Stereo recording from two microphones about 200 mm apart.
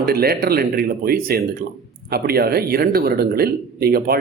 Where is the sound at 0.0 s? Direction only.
50° right (ahead or behind).